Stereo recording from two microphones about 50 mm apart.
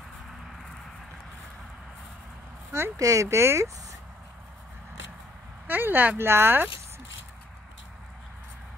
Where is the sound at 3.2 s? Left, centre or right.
Right.